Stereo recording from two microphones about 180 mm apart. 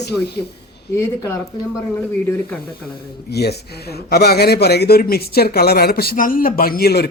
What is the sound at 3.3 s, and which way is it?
A man's voice, 65° left (ahead or behind).